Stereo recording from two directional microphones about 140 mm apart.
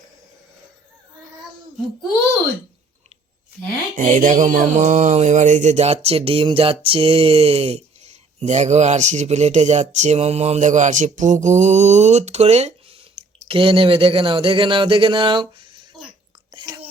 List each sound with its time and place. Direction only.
3.9 s mantra: 65° right (ahead or behind); by 13.0 s 50° right (ahead or behind)
13.2 s drip: 40° right (ahead or behind)
13.5 s speech: 40° right (ahead or behind)
16.5 s chewing: 25° right (ahead or behind)